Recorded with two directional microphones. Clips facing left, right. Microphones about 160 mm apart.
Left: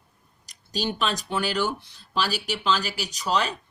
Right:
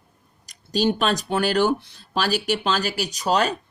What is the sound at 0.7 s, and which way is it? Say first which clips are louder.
Speech: right 6 dB; 45° right (ahead or behind).